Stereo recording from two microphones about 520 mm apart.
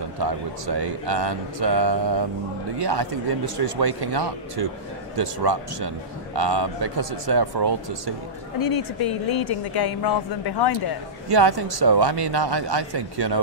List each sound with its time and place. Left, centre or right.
0.2 s speech: right
8.5 s speech: left
11.3 s speech: right